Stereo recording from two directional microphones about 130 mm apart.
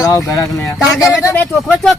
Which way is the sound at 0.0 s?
25° left (ahead or behind).